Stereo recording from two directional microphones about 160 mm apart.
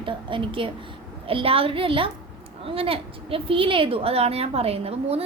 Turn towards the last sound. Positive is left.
turn(degrees=-40)  # may be behind; listen again after turning